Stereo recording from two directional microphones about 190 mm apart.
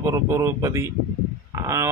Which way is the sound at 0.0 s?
15° right (ahead or behind).